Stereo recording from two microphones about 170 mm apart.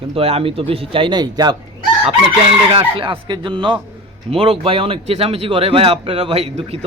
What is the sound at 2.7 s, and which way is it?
A man's voice, 30° right (ahead or behind).